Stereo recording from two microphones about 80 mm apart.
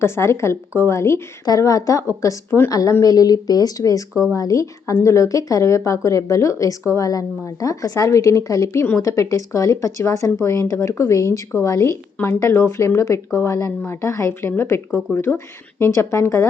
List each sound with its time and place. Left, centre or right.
0.0 s speech: left
1.5 s speech: left